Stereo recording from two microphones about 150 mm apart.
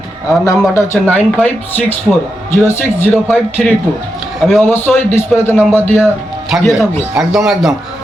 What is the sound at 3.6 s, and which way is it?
Speech, centre (ahead or behind).